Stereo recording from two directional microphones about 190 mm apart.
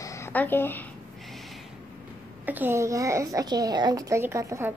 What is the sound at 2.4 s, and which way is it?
A woman's voice, 10° right (ahead or behind).